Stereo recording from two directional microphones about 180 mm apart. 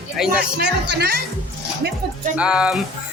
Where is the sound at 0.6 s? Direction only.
70° right (ahead or behind).